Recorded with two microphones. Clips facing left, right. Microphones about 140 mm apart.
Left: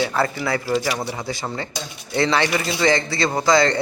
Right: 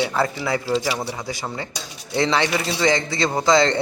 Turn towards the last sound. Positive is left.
turn(degrees=-20)  # may be behind; listen again after turning